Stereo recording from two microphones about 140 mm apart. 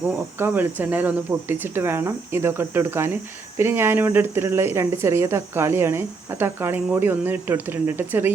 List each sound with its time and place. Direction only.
0.0 s speech: 15° right (ahead or behind)